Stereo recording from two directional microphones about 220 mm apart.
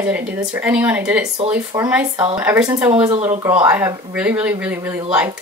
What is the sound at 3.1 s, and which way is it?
Speech, 30° right (ahead or behind).